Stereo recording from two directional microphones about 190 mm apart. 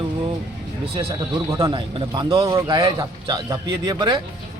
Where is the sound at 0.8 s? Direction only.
30° right (ahead or behind).